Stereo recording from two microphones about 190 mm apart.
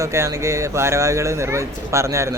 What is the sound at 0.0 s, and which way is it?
Speech, 15° right (ahead or behind).